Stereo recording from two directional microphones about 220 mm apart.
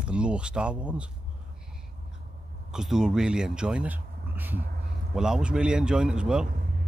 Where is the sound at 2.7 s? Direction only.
Centre (ahead or behind).